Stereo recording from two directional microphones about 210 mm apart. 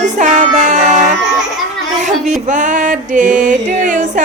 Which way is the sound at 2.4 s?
35° right (ahead or behind).